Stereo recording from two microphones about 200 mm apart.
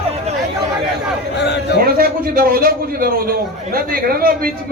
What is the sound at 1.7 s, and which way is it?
A man's voice, 50° right (ahead or behind).